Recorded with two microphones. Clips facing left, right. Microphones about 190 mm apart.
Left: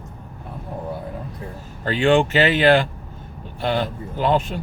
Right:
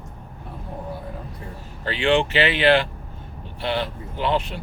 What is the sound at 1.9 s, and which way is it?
Speech, 45° left (ahead or behind).